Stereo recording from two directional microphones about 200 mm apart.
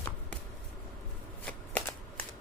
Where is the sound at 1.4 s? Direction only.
5° left (ahead or behind).